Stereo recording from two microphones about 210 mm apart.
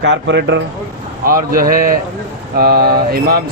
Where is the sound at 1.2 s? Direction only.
40° right (ahead or behind).